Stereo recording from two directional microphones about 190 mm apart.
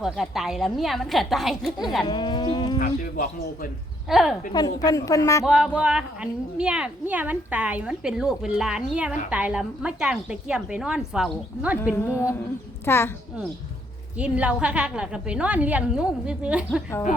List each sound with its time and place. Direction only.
0.0 s a woman's voice: centre (ahead or behind)
2.0 s livestock: 25° left (ahead or behind)
2.7 s speech: 45° left (ahead or behind)
4.1 s a woman's voice: centre (ahead or behind)
4.5 s a woman's voice: 20° left (ahead or behind)
5.5 s a woman's voice: 5° right (ahead or behind)
11.9 s a woman's voice: 15° left (ahead or behind)
14.2 s a woman's voice: 5° right (ahead or behind)